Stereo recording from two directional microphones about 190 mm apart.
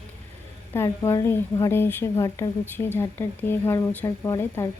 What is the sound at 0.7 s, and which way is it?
A woman's voice, 15° left (ahead or behind).